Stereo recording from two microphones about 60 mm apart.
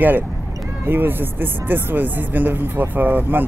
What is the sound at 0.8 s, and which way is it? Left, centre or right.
A woman's voice, right.